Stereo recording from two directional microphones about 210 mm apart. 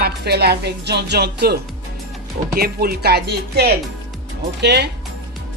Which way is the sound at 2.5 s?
45° right (ahead or behind).